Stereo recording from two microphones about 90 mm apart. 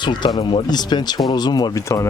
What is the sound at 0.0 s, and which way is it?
Speech, 60° left (ahead or behind).